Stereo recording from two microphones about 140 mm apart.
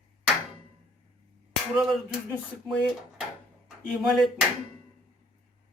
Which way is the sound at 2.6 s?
Centre (ahead or behind).